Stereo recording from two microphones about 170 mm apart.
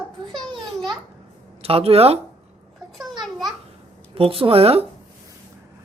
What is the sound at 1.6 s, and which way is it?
Speech, 35° right (ahead or behind).